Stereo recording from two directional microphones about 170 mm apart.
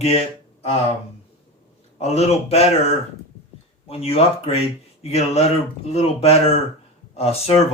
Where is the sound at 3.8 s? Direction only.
35° left (ahead or behind).